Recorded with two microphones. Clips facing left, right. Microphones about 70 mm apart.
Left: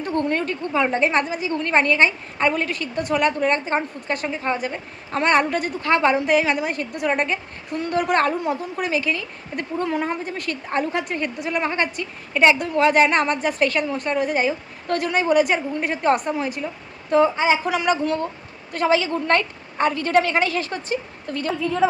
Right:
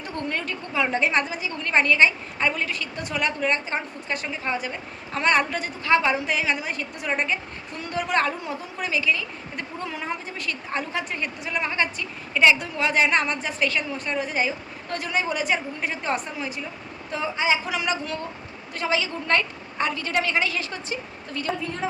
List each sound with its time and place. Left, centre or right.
0.0 s a woman's voice: left